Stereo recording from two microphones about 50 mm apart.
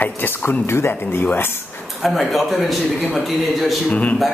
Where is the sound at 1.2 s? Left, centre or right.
Left.